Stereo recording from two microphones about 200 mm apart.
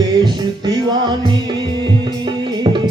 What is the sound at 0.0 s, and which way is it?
Music, 20° right (ahead or behind).